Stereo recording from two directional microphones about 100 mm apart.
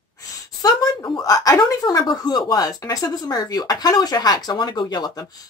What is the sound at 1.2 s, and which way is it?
Speech, 35° left (ahead or behind).